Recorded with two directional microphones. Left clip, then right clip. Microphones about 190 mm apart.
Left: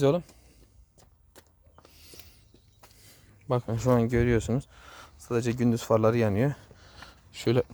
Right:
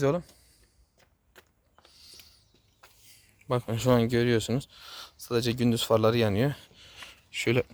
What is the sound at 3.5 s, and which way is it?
Speech, 10° left (ahead or behind).